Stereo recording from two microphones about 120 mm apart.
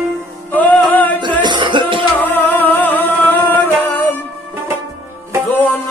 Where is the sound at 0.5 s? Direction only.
15° left (ahead or behind).